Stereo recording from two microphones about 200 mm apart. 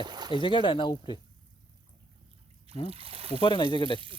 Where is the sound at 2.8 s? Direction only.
30° right (ahead or behind).